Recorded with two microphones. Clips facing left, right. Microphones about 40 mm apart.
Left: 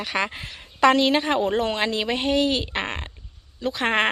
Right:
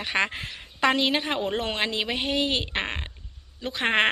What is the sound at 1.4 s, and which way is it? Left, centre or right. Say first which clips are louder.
Speech: left 4 dB; right.